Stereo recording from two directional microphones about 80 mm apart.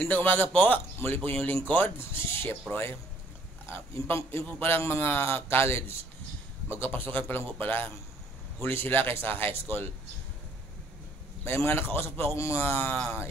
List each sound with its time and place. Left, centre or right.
0.1 s a man's voice: left
11.4 s a man's voice: left